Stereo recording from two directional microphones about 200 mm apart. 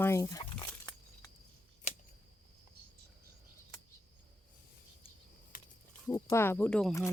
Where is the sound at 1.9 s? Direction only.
35° left (ahead or behind).